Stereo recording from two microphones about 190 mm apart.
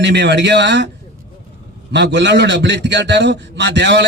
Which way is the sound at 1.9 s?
65° right (ahead or behind).